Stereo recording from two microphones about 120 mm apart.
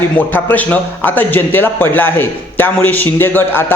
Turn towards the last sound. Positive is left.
turn(degrees=20)  # may be behind; listen again after turning